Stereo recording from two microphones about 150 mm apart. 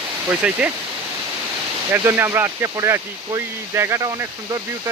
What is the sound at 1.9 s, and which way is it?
Speech, 15° right (ahead or behind).